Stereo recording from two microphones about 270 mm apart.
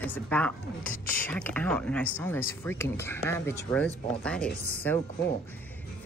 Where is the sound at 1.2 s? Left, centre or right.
Centre.